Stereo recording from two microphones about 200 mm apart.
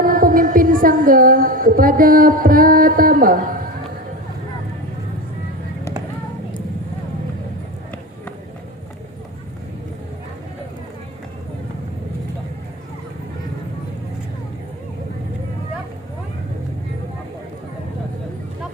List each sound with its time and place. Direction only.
0.0 s music: 45° right (ahead or behind)